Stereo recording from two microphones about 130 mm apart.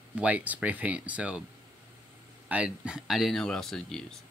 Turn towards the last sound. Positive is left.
turn(degrees=5)  # may be behind; listen again after turning